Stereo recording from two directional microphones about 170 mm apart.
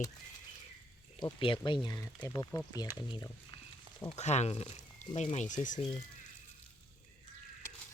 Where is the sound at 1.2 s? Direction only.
25° left (ahead or behind).